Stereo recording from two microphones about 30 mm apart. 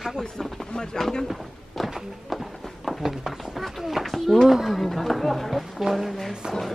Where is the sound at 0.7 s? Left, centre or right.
Left.